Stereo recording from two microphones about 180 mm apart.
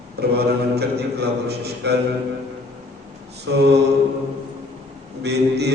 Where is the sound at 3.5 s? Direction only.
65° right (ahead or behind).